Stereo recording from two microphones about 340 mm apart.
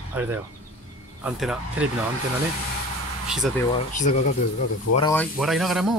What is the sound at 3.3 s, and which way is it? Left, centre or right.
Speech, centre.